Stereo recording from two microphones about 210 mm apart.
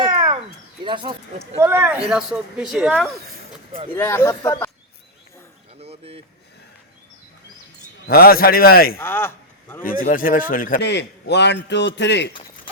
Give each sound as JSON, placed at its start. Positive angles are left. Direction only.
{"t": 0.0, "sound": "a sound", "side_deg": -20}
{"t": 0.9, "sound": "speech", "side_deg": -20}
{"t": 1.5, "sound": "speech", "side_deg": -10}
{"t": 3.9, "sound": "speech", "side_deg": 10}
{"t": 5.8, "sound": "a sound", "side_deg": -30}
{"t": 8.0, "sound": "a man's voice", "side_deg": 45}
{"t": 9.0, "sound": "speech", "side_deg": 10}
{"t": 9.8, "sound": "speech", "side_deg": 40}
{"t": 10.8, "sound": "a man's voice", "side_deg": 55}